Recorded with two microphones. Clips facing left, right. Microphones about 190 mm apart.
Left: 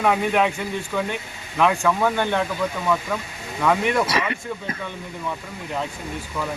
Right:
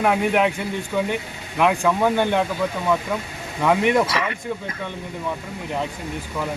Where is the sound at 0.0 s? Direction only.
10° right (ahead or behind).